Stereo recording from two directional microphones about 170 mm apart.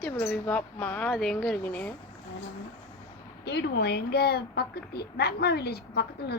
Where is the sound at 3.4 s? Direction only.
80° left.